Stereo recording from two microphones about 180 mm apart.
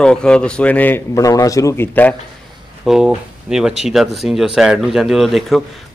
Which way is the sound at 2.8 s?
5° right (ahead or behind).